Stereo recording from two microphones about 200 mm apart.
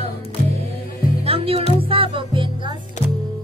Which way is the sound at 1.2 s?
30° right (ahead or behind).